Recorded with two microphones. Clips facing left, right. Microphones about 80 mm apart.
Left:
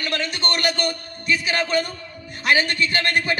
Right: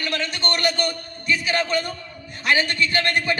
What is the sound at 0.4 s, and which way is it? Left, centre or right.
A man's voice, right.